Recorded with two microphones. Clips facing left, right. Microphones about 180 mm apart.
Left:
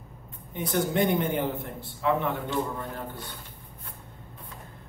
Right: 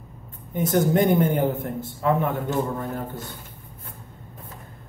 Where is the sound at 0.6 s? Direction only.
45° right (ahead or behind).